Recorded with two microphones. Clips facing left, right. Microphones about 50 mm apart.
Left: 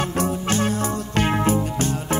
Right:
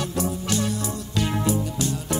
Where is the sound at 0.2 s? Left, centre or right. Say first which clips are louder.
Left 3 dB; left.